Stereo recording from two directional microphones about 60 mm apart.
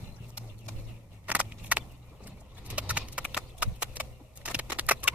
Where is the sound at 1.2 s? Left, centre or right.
Right.